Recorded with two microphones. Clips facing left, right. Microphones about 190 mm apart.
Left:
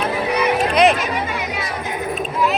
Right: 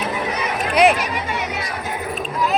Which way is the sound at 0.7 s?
10° right (ahead or behind).